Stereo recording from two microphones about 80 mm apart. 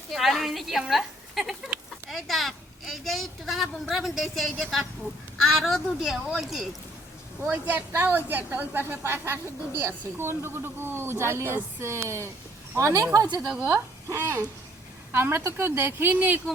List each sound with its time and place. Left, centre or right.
0.1 s a sound: centre
5.4 s a woman's voice: centre
7.5 s a woman's voice: right
13.2 s a woman's voice: right
13.7 s a woman's voice: right